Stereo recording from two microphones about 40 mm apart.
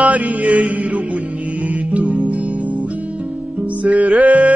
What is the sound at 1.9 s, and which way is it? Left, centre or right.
Music, right.